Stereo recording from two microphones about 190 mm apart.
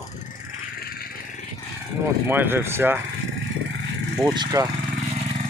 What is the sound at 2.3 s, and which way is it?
Speech, 10° right (ahead or behind).